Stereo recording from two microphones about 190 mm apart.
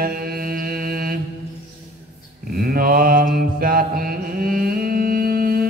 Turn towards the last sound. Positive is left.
turn(degrees=-50)  # may be behind; listen again after turning